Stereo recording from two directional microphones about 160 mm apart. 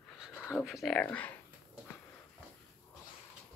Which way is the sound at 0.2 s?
Centre (ahead or behind).